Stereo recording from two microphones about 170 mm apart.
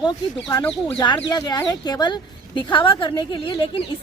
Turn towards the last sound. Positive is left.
turn(degrees=30)  # may be behind; listen again after turning